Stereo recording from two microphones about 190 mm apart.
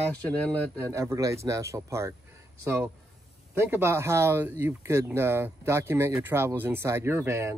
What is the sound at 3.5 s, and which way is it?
Speech, 15° right (ahead or behind).